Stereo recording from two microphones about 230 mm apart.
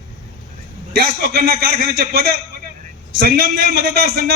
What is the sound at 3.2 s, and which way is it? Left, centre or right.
A man's voice, right.